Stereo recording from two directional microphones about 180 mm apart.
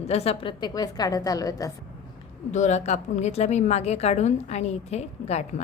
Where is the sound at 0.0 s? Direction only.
35° left (ahead or behind); by 1.7 s 20° left (ahead or behind).